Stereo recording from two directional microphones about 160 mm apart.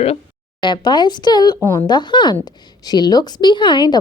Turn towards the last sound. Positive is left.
turn(degrees=30)  # may be behind; listen again after turning